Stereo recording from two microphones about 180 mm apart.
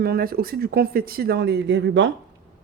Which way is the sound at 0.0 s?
60° right (ahead or behind).